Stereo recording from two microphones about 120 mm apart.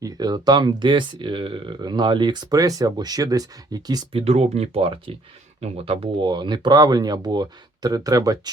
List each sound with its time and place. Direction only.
0.0 s speech: 35° right (ahead or behind)
4.1 s speech: 60° right (ahead or behind); by 8.4 s 30° right (ahead or behind)